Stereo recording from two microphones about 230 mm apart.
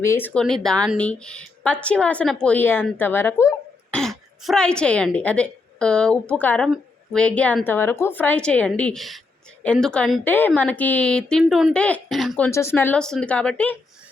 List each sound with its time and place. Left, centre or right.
0.0 s a woman's voice: centre
12.5 s a woman's voice: centre